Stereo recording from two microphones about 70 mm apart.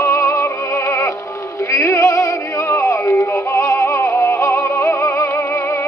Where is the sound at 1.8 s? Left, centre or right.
Left.